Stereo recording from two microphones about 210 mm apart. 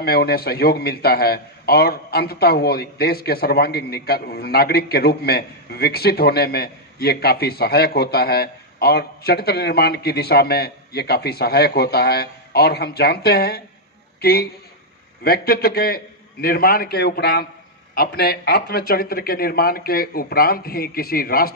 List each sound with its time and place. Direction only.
0.0 s a man's voice: 50° left (ahead or behind)